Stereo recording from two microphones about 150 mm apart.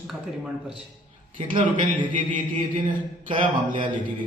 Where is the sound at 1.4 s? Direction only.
35° right (ahead or behind).